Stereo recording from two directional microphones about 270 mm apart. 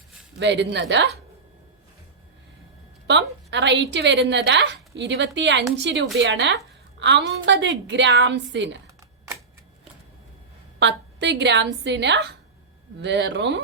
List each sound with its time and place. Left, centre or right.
0.3 s a woman's voice: right
3.1 s a woman's voice: right
10.8 s a woman's voice: right